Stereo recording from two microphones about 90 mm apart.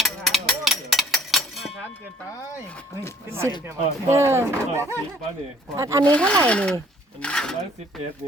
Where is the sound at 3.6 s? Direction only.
30° right (ahead or behind).